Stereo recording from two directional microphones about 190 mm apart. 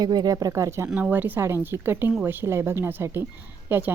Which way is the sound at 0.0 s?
20° right (ahead or behind).